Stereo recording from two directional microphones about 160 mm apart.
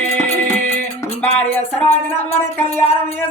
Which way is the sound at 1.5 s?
10° left (ahead or behind).